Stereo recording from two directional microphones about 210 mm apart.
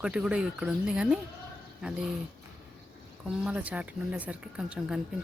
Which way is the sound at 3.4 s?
5° right (ahead or behind).